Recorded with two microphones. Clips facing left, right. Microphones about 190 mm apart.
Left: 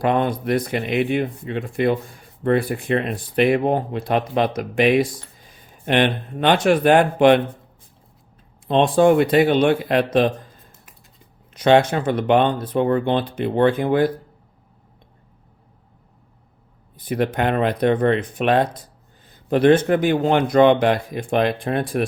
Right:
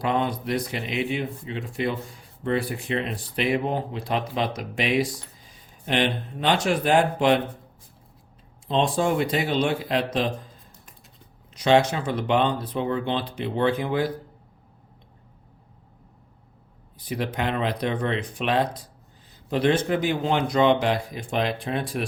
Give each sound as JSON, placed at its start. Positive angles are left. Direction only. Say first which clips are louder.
{"t": 0.0, "sound": "speech", "louder": "left 5 dB", "side_deg": 55}
{"t": 8.6, "sound": "speech", "louder": "left 8 dB", "side_deg": 60}
{"t": 11.5, "sound": "speech", "louder": "left 4 dB", "side_deg": 55}
{"t": 17.0, "sound": "speech", "louder": "left 7 dB", "side_deg": 55}